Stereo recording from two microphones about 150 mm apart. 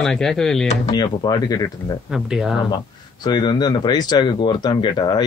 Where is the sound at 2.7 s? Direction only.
30° left (ahead or behind).